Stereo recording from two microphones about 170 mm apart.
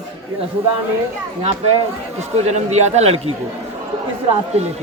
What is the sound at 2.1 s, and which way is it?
Speech, 40° right (ahead or behind).